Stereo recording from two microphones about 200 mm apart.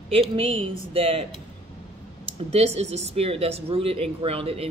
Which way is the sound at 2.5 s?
30° right (ahead or behind).